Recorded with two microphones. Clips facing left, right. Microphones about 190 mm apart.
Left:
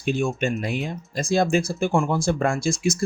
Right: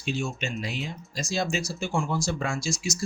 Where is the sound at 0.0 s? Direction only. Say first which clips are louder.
Left 7 dB; 55° left (ahead or behind).